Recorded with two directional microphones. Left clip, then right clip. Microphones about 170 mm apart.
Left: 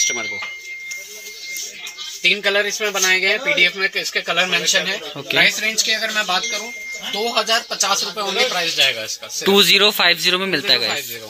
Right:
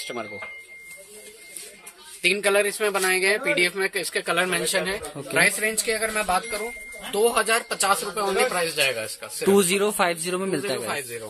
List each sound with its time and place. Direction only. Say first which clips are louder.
2.2 s speech: left 4 dB; 30° right (ahead or behind)
9.6 s a man's voice: left 12 dB; centre (ahead or behind)